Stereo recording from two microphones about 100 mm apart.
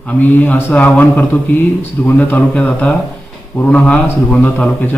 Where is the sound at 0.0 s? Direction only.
15° left (ahead or behind).